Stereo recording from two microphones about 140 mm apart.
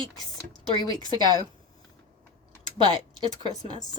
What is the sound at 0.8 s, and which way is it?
Speech, 25° left (ahead or behind).